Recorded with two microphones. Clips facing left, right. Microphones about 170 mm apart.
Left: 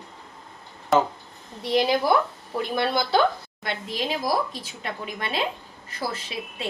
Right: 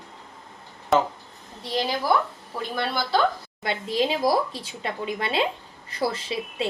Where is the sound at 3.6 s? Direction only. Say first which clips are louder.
Right 5 dB; 30° right (ahead or behind).